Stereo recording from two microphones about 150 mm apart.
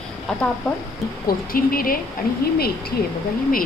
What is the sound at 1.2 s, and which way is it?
Speech, 75° left (ahead or behind).